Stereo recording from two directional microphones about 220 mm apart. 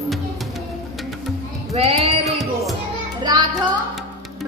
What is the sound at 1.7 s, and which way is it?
Child singing, 30° right (ahead or behind).